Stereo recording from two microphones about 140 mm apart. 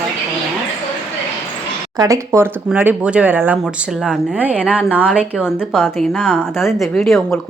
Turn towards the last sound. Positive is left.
turn(degrees=0)  # may be behind; listen again after turning